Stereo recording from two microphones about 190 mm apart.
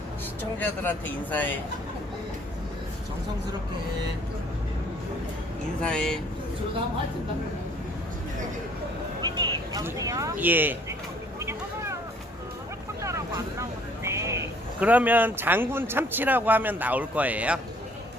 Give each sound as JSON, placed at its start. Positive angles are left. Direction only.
{"t": 0.6, "sound": "a man's voice", "side_deg": 10}
{"t": 5.8, "sound": "speech", "side_deg": 5}
{"t": 9.2, "sound": "speech", "side_deg": -20}
{"t": 11.3, "sound": "vehicle", "side_deg": -15}
{"t": 13.0, "sound": "speech", "side_deg": -15}